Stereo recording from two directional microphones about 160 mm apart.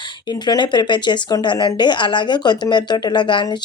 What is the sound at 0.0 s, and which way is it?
Speech, 30° left (ahead or behind).